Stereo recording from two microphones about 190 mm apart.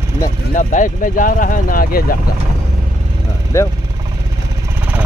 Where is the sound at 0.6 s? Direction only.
45° left (ahead or behind).